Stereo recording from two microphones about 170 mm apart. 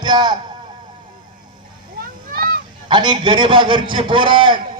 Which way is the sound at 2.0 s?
60° right (ahead or behind).